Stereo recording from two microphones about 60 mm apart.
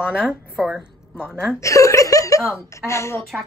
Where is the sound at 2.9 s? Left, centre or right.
Left.